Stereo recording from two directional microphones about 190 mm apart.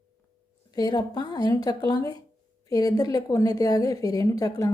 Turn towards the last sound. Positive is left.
turn(degrees=20)  # may be behind; listen again after turning